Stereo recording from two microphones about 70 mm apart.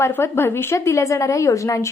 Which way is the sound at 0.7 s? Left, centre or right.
Left.